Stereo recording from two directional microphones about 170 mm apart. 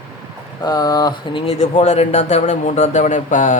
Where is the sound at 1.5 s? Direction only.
40° left (ahead or behind).